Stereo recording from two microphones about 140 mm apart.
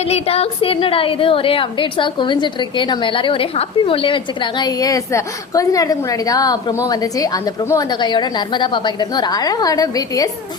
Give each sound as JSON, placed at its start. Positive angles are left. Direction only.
{"t": 0.0, "sound": "a woman's voice", "side_deg": 45}